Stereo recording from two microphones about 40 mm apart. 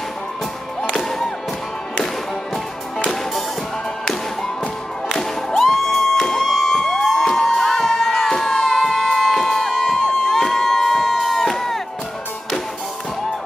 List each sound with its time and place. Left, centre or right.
5.6 s music: centre
7.1 s crowd: centre